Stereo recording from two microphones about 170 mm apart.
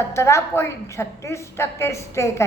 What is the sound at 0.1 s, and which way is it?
A woman's voice, 15° left (ahead or behind).